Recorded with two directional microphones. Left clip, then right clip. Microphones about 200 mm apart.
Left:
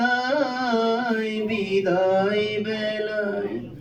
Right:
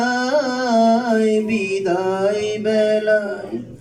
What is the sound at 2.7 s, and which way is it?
Mantra, 45° right (ahead or behind).